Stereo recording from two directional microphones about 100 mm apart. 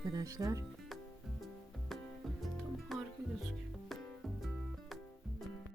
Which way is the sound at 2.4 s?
Centre (ahead or behind).